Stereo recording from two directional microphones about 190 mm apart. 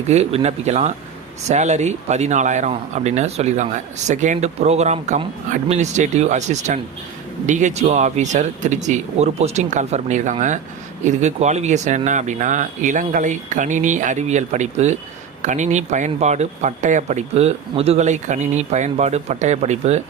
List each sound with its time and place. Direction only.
0.1 s speech: 35° right (ahead or behind)